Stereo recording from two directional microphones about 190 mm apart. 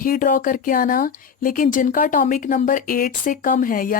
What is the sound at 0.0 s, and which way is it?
Speech, 45° left (ahead or behind).